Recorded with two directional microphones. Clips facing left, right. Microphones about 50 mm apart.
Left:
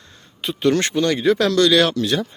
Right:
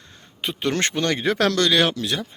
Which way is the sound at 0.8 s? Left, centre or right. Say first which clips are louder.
Left 3 dB; right.